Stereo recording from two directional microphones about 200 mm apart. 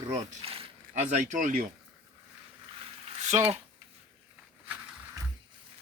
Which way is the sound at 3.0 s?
35° right (ahead or behind).